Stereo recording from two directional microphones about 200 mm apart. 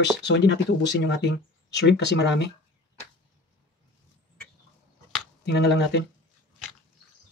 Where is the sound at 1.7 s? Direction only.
55° left (ahead or behind).